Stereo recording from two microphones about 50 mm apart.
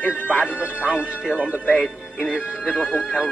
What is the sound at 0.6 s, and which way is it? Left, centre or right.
Speech, right.